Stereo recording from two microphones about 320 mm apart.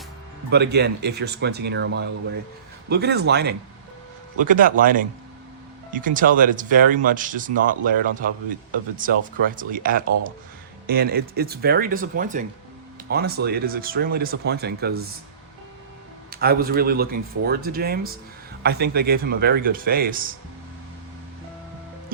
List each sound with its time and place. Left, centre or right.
0.5 s speech: right
16.3 s speech: right